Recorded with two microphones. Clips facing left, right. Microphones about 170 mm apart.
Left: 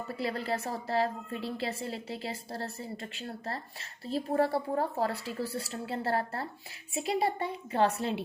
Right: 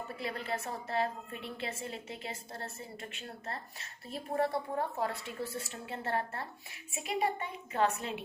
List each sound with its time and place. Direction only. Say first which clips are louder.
0.2 s a woman's voice: left 5 dB; 35° left (ahead or behind)